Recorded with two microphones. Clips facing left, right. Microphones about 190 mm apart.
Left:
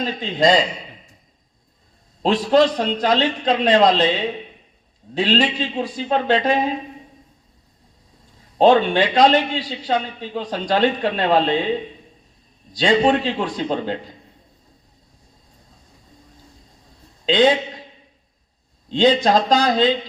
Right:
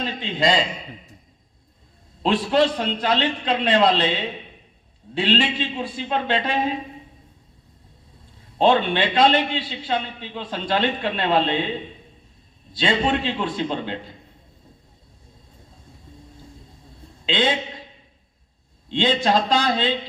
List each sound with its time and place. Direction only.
0.0 s a man's voice: 40° left (ahead or behind)
2.2 s a man's voice: 40° left (ahead or behind)
8.5 s a man's voice: 45° left (ahead or behind)
12.7 s a man's voice: 40° left (ahead or behind)
17.2 s a man's voice: 40° left (ahead or behind)
18.9 s a man's voice: 40° left (ahead or behind)